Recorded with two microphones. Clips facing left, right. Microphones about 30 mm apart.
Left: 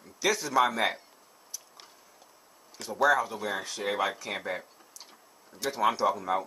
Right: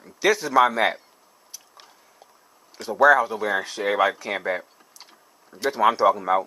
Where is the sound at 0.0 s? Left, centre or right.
Right.